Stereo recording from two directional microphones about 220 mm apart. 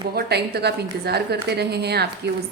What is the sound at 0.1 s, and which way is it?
A woman's voice, 45° right (ahead or behind).